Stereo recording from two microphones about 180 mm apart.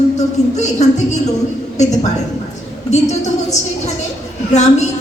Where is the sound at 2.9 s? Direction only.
40° left (ahead or behind).